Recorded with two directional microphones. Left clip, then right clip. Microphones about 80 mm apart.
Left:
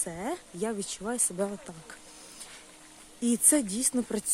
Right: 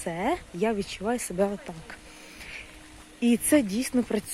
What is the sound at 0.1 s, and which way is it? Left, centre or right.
Speech, centre.